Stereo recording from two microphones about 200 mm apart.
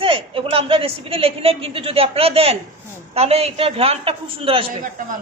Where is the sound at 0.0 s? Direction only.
25° right (ahead or behind).